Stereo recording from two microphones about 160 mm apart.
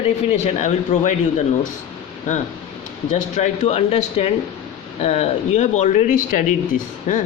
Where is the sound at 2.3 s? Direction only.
50° left (ahead or behind).